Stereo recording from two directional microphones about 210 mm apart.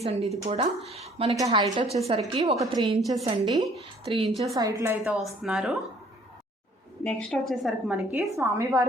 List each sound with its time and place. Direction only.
0.0 s a woman's voice: 30° right (ahead or behind)
1.7 s a woman's voice: 35° right (ahead or behind); by 4.9 s 15° right (ahead or behind)
5.0 s a woman's voice: centre (ahead or behind)
7.0 s a woman's voice: 5° left (ahead or behind); by 8.9 s 15° right (ahead or behind)